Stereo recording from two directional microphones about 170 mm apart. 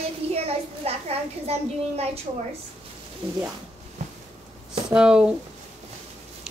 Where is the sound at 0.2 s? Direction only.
35° right (ahead or behind).